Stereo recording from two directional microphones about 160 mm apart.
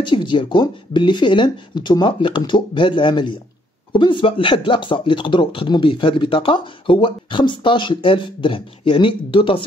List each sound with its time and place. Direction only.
0.0 s speech: 30° left (ahead or behind)